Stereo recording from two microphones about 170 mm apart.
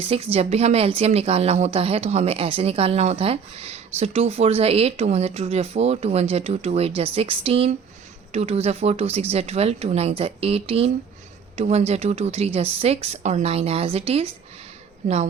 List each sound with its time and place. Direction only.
0.0 s speech: 35° right (ahead or behind)